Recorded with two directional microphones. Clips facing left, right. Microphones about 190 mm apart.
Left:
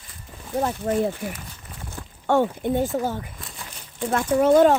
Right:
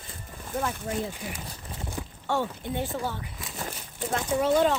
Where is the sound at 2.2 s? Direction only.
50° left (ahead or behind).